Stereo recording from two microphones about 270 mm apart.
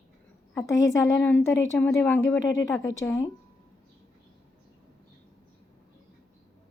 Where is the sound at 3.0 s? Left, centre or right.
Centre.